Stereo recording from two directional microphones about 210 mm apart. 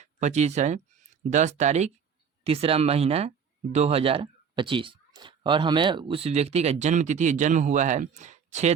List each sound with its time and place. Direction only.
0.0 s speech: 35° right (ahead or behind)